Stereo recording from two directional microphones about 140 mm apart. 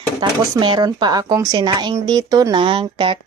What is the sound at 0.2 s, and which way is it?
Speech, 30° right (ahead or behind).